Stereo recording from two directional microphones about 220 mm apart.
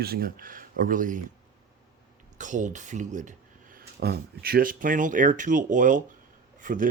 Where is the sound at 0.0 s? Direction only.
45° right (ahead or behind).